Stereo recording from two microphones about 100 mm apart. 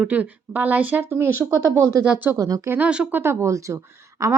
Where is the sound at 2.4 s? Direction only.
35° right (ahead or behind).